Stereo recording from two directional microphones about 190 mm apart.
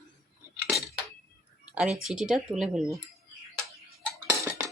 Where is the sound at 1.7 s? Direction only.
5° right (ahead or behind).